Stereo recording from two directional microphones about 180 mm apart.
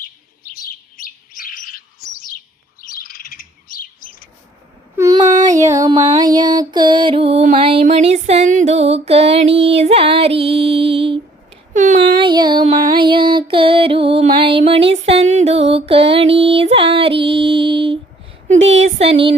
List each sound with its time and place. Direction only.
0.0 s bird: 55° left (ahead or behind)
2.8 s bird: 55° left (ahead or behind)
4.9 s a sound: 20° right (ahead or behind)
5.5 s music: 20° right (ahead or behind)
11.7 s speech: 45° right (ahead or behind)
12.2 s music: 25° right (ahead or behind)
18.4 s speech: 90° right
18.9 s music: 35° right (ahead or behind)